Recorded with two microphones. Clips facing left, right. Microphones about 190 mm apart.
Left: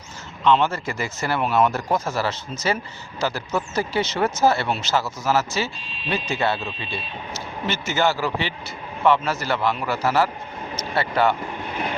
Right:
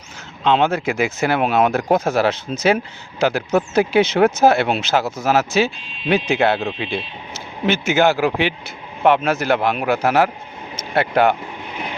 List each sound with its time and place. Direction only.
0.4 s speech: 65° right (ahead or behind)